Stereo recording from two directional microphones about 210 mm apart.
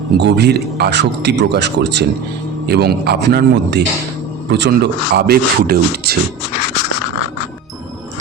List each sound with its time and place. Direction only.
0.2 s speech: 50° right (ahead or behind)